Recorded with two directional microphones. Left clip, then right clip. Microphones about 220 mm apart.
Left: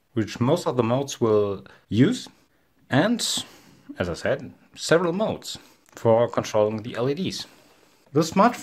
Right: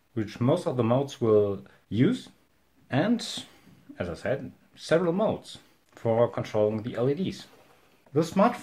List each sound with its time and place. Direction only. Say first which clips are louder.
0.1 s speech: left 3 dB; 45° left (ahead or behind)